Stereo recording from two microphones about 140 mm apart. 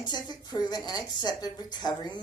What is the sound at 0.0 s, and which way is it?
A woman's voice, 30° left (ahead or behind).